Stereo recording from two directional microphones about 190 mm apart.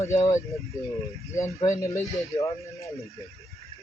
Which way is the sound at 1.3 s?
15° left (ahead or behind).